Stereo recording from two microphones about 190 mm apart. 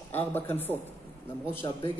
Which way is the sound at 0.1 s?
10° left (ahead or behind).